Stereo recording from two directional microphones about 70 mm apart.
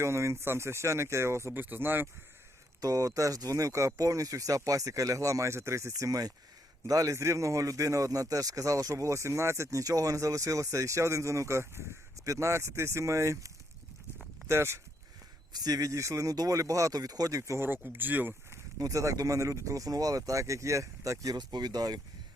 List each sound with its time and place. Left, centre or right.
0.0 s speech: right
1.7 s speech: right
2.8 s a man's voice: right
5.9 s a man's voice: right
15.5 s a man's voice: right
17.7 s speech: right
18.8 s a man's voice: right
21.3 s speech: right